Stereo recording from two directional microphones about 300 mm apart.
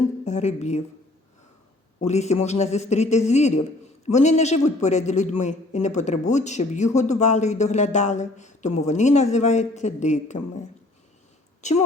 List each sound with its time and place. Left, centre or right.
0.3 s a man's voice: left
2.0 s a man's voice: left
11.6 s a woman's voice: left